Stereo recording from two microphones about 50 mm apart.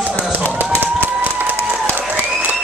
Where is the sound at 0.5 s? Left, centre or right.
Right.